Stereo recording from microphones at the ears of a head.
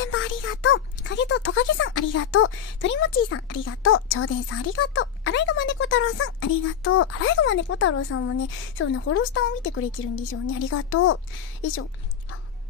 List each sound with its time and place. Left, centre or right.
0.0 s speech: left